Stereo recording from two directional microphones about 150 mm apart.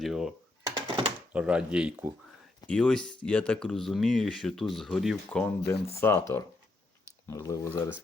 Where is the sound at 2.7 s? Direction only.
5° left (ahead or behind).